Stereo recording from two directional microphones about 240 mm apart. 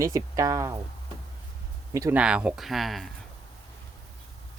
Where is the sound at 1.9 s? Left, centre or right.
Centre.